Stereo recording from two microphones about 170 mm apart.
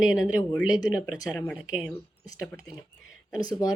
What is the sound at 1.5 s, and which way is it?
Speech, 5° right (ahead or behind).